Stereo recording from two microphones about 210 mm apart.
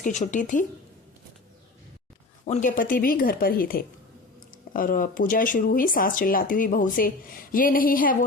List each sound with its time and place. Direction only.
0.0 s speech: 35° left (ahead or behind)
2.5 s speech: 40° left (ahead or behind)